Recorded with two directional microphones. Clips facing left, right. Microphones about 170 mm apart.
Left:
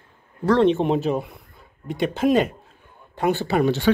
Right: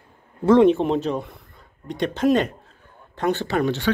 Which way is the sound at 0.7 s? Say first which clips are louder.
Even; 5° left (ahead or behind).